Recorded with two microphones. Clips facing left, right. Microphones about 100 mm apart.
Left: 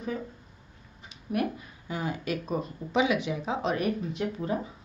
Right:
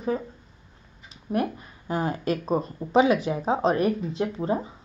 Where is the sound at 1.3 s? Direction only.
40° right (ahead or behind).